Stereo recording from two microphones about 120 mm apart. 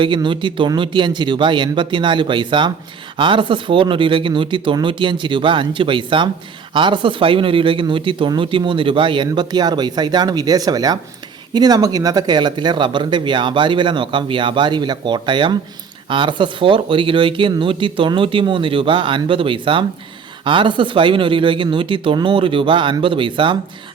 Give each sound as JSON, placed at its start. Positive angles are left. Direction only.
{"t": 0.0, "sound": "speech", "side_deg": -40}